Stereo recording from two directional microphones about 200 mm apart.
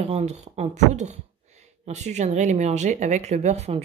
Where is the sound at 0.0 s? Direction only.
30° right (ahead or behind).